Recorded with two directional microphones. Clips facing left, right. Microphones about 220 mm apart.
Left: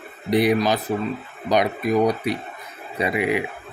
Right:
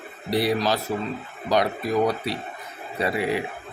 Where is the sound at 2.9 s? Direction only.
15° left (ahead or behind).